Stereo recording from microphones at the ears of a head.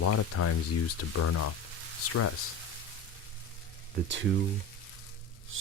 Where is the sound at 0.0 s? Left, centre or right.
Left.